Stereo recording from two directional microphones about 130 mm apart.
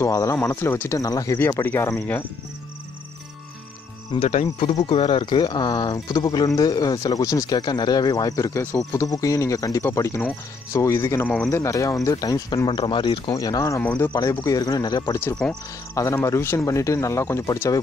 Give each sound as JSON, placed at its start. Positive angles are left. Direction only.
{"t": 0.0, "sound": "speech", "side_deg": 25}
{"t": 4.8, "sound": "speech", "side_deg": 45}
{"t": 11.2, "sound": "speech", "side_deg": 10}
{"t": 11.5, "sound": "speech", "side_deg": 25}
{"t": 13.3, "sound": "speech", "side_deg": 25}
{"t": 15.9, "sound": "speech", "side_deg": 20}